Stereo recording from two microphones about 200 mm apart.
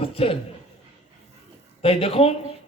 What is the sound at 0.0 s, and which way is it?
Speech, 30° left (ahead or behind).